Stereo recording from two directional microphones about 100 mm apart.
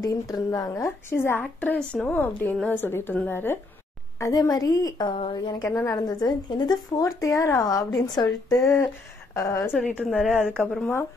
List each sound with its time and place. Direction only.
0.0 s speech: 40° left (ahead or behind)
1.4 s a woman's voice: 15° left (ahead or behind)
4.2 s a woman's voice: 40° left (ahead or behind)
5.7 s speech: 25° left (ahead or behind)
5.9 s speech: 45° left (ahead or behind)
8.0 s speech: 40° left (ahead or behind)
8.6 s speech: 25° left (ahead or behind)
9.8 s a woman's voice: 10° left (ahead or behind)